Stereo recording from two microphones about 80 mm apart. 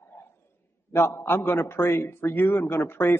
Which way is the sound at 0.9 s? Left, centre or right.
Left.